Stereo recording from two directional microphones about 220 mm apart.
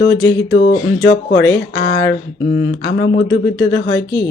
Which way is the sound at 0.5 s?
45° left (ahead or behind).